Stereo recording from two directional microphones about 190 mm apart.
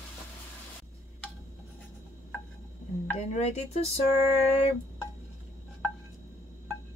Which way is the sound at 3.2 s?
35° left (ahead or behind).